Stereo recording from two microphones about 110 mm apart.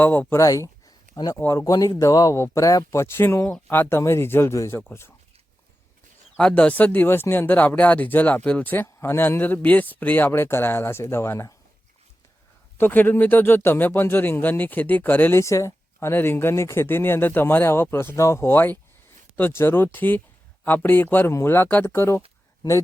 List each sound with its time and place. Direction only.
0.0 s speech: 15° left (ahead or behind)
0.3 s a sound: 30° left (ahead or behind)
1.5 s speech: 35° left (ahead or behind)
6.3 s speech: 10° left (ahead or behind)
12.7 s speech: 20° left (ahead or behind)